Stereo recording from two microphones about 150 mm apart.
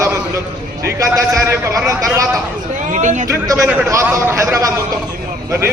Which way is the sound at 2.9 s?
55° right (ahead or behind).